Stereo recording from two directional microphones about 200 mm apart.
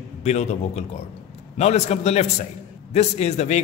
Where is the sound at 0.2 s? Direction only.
35° left (ahead or behind).